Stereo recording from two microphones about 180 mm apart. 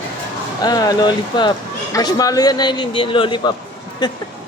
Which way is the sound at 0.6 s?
20° left (ahead or behind).